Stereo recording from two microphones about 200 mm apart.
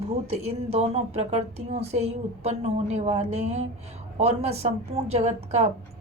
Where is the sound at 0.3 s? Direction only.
30° right (ahead or behind).